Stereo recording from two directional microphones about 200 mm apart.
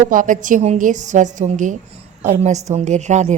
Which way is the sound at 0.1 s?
40° right (ahead or behind).